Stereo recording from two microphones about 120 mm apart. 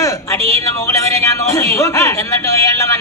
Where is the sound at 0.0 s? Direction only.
25° left (ahead or behind).